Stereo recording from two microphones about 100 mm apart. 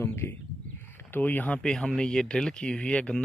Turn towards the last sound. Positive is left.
turn(degrees=10)  # may be behind; listen again after turning